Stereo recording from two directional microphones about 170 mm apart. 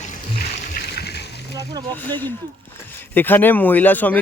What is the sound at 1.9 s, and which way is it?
Speech, 10° left (ahead or behind).